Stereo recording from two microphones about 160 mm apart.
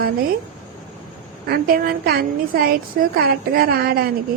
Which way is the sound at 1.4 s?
65° right (ahead or behind).